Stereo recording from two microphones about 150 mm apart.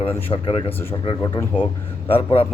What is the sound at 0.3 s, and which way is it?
Speech, 25° left (ahead or behind).